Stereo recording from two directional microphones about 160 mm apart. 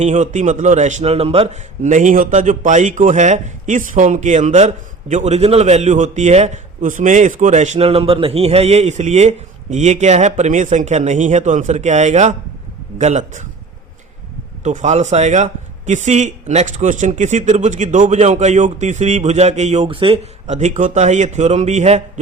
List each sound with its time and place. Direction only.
0.0 s a man's voice: 50° right (ahead or behind)
14.6 s a man's voice: 50° right (ahead or behind)